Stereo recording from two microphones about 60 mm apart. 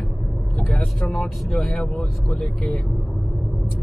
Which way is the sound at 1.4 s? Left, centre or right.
Centre.